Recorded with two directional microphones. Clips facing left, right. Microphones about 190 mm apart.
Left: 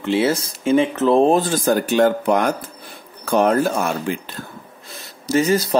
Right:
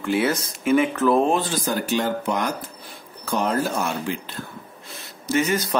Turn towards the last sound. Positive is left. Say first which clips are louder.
# left 5 dB
turn(degrees=35)  # may be behind; listen again after turning